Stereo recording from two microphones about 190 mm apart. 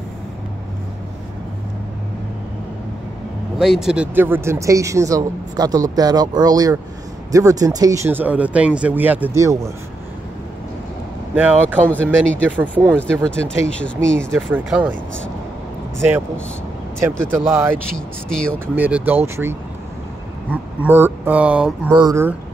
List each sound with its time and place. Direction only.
3.5 s speech: 5° right (ahead or behind)
11.3 s speech: 10° right (ahead or behind)
11.8 s speech: 10° left (ahead or behind)
12.4 s speech: 10° right (ahead or behind)
12.9 s speech: 5° left (ahead or behind)
14.3 s speech: 10° right (ahead or behind)
17.7 s speech: 5° left (ahead or behind)
18.8 s speech: 10° right (ahead or behind)